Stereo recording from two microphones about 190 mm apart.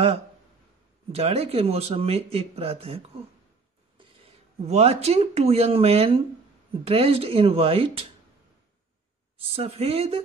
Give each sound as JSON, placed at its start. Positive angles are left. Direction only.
{"t": 1.1, "sound": "speech", "side_deg": -30}
{"t": 4.6, "sound": "speech", "side_deg": -35}
{"t": 9.4, "sound": "speech", "side_deg": -30}